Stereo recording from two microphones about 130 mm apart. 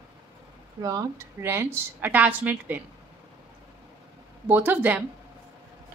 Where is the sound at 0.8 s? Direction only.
30° right (ahead or behind); by 2.8 s 10° right (ahead or behind).